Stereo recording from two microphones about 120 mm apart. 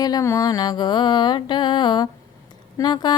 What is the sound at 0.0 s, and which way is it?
Mantra, 30° left (ahead or behind).